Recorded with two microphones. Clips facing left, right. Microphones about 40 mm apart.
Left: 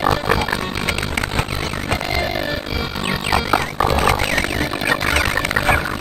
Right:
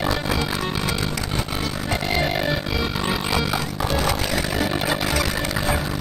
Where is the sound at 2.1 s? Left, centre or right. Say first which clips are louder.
Right 3 dB; centre.